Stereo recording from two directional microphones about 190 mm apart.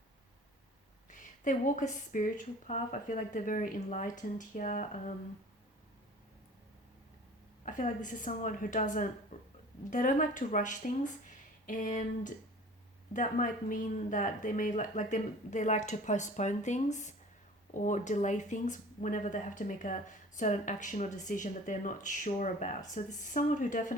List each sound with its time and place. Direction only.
1.1 s speech: 45° left (ahead or behind)
7.6 s speech: 40° left (ahead or behind)